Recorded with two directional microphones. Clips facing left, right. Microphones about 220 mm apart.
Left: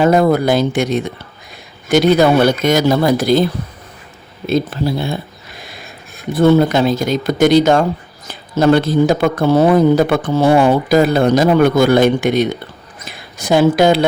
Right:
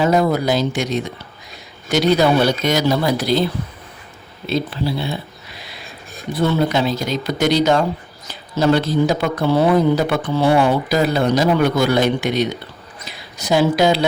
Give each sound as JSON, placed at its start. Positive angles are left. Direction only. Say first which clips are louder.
{"t": 0.0, "sound": "speech", "louder": "left 4 dB", "side_deg": 55}
{"t": 4.4, "sound": "a sound", "louder": "left 4 dB", "side_deg": 45}
{"t": 6.3, "sound": "a woman's voice", "louder": "left 7 dB", "side_deg": 50}